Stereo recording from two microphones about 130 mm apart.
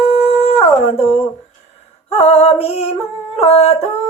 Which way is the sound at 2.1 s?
55° left (ahead or behind).